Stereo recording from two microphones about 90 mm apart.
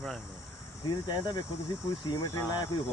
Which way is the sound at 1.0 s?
50° left (ahead or behind).